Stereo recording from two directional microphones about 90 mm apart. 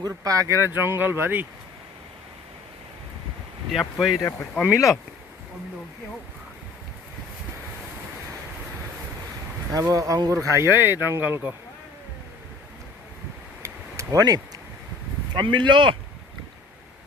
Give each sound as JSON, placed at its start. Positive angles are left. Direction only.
{"t": 0.0, "sound": "speech", "side_deg": -40}
{"t": 3.7, "sound": "speech", "side_deg": -5}
{"t": 4.2, "sound": "speech", "side_deg": 30}
{"t": 4.6, "sound": "speech", "side_deg": -5}
{"t": 9.7, "sound": "speech", "side_deg": -40}
{"t": 13.6, "sound": "a sound", "side_deg": -35}
{"t": 15.3, "sound": "speech", "side_deg": -60}